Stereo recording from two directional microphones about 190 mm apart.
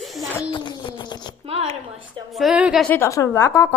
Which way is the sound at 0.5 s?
25° left (ahead or behind).